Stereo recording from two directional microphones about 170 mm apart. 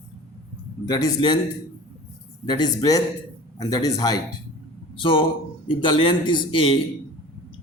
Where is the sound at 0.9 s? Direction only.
20° left (ahead or behind).